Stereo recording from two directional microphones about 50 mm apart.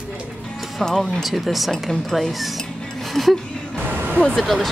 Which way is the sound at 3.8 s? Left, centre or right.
Right.